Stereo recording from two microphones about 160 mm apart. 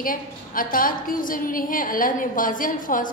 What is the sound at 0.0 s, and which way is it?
A woman's voice, 60° left (ahead or behind).